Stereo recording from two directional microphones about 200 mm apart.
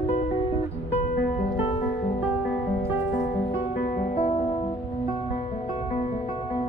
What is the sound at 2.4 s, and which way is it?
Music, 5° right (ahead or behind).